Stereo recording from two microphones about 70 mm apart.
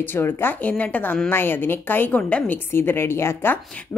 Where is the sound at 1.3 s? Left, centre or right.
Left.